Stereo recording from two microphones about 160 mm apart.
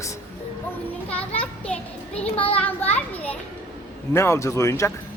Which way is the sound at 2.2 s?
35° left (ahead or behind).